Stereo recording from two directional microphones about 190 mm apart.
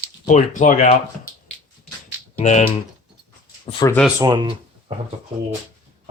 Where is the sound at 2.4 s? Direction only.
35° left (ahead or behind).